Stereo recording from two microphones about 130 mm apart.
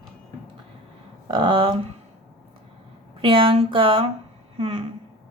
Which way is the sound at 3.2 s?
40° right (ahead or behind).